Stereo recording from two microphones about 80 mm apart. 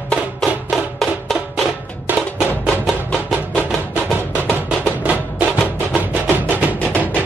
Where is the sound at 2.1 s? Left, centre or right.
Right.